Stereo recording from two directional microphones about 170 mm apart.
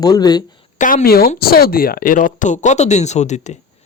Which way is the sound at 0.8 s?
60° left (ahead or behind).